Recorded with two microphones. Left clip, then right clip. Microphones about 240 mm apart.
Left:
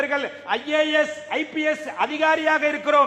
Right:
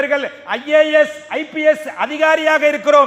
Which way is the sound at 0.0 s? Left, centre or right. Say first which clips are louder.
Right 6 dB; right.